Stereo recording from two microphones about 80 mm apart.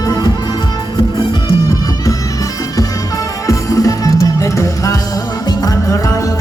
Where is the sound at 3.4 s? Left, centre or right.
Left.